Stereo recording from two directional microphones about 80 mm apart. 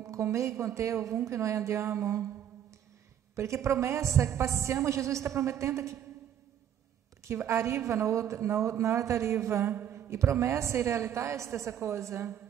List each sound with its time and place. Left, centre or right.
0.0 s a woman's voice: right
3.3 s a woman's voice: right
7.2 s a woman's voice: right